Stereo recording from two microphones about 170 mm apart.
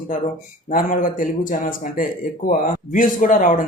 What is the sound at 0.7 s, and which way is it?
A man's voice, 55° left (ahead or behind).